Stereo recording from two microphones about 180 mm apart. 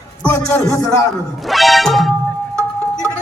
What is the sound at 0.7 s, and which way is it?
Speech, 20° left (ahead or behind).